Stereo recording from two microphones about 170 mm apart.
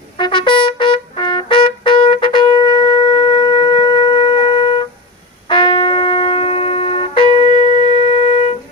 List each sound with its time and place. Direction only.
0.2 s trumpet: 30° left (ahead or behind)
5.5 s shofar: 30° left (ahead or behind)